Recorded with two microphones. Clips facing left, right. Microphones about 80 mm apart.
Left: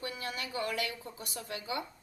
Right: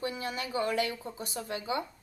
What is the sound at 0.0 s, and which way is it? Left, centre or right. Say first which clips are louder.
Speech: right 4 dB; right.